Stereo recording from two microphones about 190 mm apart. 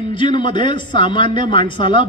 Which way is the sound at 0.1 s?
25° left (ahead or behind).